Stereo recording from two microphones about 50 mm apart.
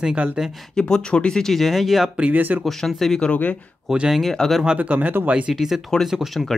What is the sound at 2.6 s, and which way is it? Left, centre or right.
Speech, centre.